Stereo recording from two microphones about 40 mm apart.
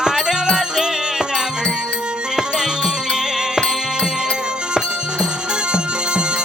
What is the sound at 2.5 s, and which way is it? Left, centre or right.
Music, centre.